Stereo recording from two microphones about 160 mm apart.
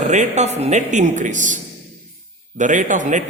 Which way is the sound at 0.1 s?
45° right (ahead or behind).